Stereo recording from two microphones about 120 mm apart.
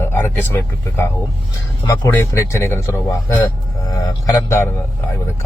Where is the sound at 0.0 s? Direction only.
20° left (ahead or behind).